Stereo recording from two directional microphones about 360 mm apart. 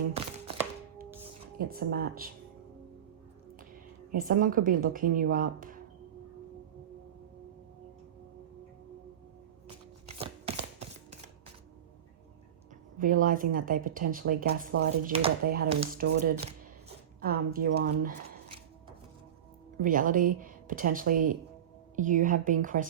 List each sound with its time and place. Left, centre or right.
1.5 s speech: right
4.1 s speech: right
10.1 s a sound: centre
13.2 s speech: right
18.0 s shuffling cards: right
19.8 s speech: right